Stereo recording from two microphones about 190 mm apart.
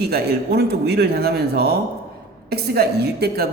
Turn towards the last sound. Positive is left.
turn(degrees=-55)  # may be behind; listen again after turning